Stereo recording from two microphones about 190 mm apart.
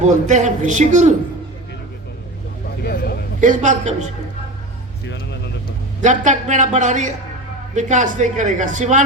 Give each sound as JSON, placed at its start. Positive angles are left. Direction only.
{"t": 0.0, "sound": "speech", "side_deg": -40}
{"t": 2.8, "sound": "a sound", "side_deg": 55}
{"t": 3.4, "sound": "speech", "side_deg": -40}
{"t": 5.0, "sound": "speech", "side_deg": 60}
{"t": 6.0, "sound": "speech", "side_deg": -40}